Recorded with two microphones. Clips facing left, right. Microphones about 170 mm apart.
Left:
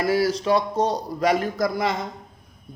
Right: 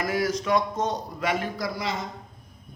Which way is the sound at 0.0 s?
30° left (ahead or behind).